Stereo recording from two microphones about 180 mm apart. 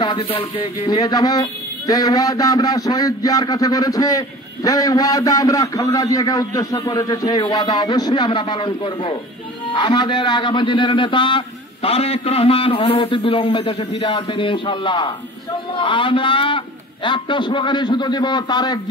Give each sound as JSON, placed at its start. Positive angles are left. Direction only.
{"t": 0.0, "sound": "a man's voice", "side_deg": 25}